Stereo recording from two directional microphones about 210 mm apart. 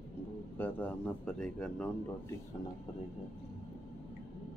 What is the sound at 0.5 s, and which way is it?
Speech, 10° left (ahead or behind).